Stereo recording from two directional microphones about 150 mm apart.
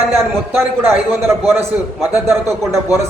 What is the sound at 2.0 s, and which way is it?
Speech, 15° right (ahead or behind).